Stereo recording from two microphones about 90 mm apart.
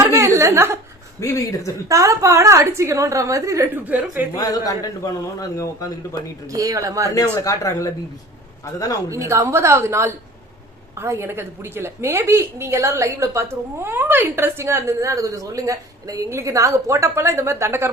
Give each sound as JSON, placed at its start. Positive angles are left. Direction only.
{"t": 0.0, "sound": "chuckle", "side_deg": -35}
{"t": 1.2, "sound": "speech", "side_deg": 35}
{"t": 1.9, "sound": "a woman's voice", "side_deg": -40}
{"t": 3.8, "sound": "a woman's voice", "side_deg": -20}
{"t": 4.4, "sound": "a man's voice", "side_deg": 45}
{"t": 6.5, "sound": "a woman's voice", "side_deg": -40}
{"t": 7.1, "sound": "speech", "side_deg": 40}
{"t": 9.0, "sound": "a woman's voice", "side_deg": -35}